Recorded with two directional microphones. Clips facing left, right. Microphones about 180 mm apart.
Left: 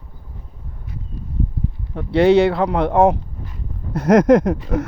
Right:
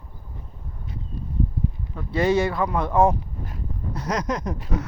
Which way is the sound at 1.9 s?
65° left (ahead or behind).